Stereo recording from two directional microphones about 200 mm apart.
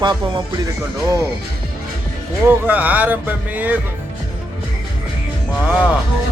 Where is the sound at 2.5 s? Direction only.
10° right (ahead or behind).